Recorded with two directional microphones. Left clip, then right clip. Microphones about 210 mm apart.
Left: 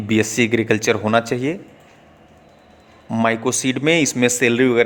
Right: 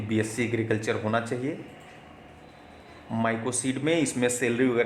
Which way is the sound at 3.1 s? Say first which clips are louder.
Left 9 dB; 35° left (ahead or behind).